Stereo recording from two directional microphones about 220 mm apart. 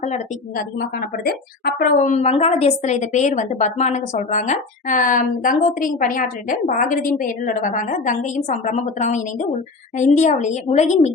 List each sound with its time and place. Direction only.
0.0 s a woman's voice: 35° left (ahead or behind)